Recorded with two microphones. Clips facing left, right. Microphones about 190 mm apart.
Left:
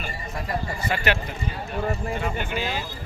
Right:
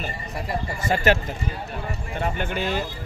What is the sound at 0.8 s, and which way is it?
Speech, 40° right (ahead or behind).